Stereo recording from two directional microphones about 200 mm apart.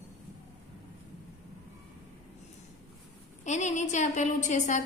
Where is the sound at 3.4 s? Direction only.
35° left (ahead or behind).